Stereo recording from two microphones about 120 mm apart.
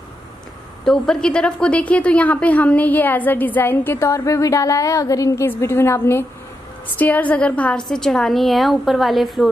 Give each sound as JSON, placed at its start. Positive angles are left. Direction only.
{"t": 0.8, "sound": "a woman's voice", "side_deg": 5}